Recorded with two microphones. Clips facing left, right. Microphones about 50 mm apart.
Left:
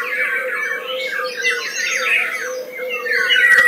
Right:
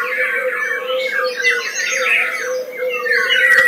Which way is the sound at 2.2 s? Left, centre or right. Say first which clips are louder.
Right 3 dB; centre.